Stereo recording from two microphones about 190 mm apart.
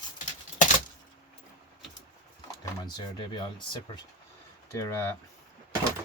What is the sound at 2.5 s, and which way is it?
Speech, 20° left (ahead or behind).